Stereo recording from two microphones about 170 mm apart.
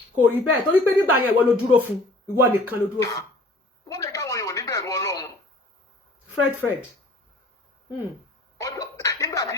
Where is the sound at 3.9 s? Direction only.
20° left (ahead or behind).